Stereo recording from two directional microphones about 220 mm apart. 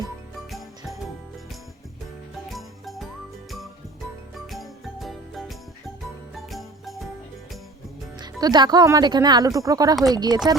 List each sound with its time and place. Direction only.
2.5 s music: centre (ahead or behind)
4.5 s jingle: centre (ahead or behind)
6.3 s jingle bell: centre (ahead or behind)
8.2 s speech: 20° right (ahead or behind)
9.9 s speech: centre (ahead or behind)
10.2 s speech: 20° right (ahead or behind)